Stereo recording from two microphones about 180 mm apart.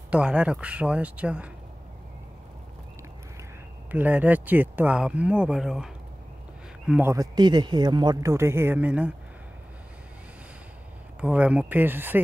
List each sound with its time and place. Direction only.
0.1 s speech: 5° right (ahead or behind)
3.9 s speech: 10° right (ahead or behind)
6.9 s speech: 10° right (ahead or behind)
11.1 s speech: 5° right (ahead or behind)